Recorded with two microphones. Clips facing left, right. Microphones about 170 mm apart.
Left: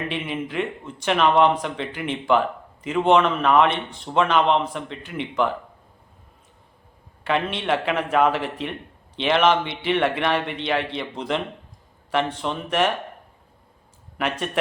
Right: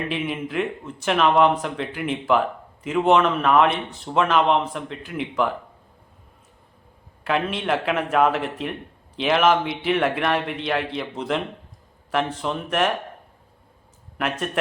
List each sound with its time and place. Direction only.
0.1 s a man's voice: 5° right (ahead or behind)
7.3 s a man's voice: centre (ahead or behind)
14.2 s a man's voice: centre (ahead or behind)